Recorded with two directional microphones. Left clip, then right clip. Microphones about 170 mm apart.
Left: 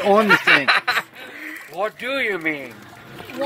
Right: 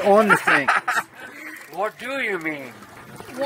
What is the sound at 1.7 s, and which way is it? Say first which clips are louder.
Speech: left 2 dB; 45° left (ahead or behind).